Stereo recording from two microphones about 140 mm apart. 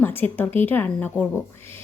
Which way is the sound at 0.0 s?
15° left (ahead or behind).